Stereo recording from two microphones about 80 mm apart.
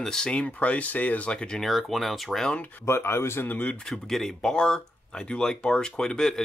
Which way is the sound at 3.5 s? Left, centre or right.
Centre.